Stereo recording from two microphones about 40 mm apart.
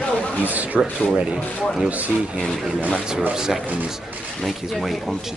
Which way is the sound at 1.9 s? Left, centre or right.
Right.